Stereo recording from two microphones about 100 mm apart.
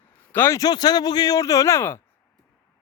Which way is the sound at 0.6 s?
40° left (ahead or behind).